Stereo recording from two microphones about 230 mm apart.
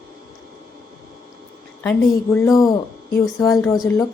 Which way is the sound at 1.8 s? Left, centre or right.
Centre.